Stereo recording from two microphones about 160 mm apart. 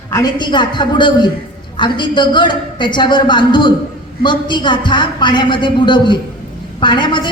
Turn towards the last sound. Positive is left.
turn(degrees=30)  # may be behind; listen again after turning